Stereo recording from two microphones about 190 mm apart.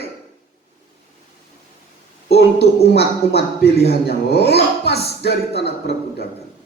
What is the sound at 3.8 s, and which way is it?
Speech, 60° left (ahead or behind).